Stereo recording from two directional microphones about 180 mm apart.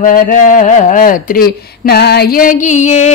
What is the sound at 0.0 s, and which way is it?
Speech, 50° left (ahead or behind).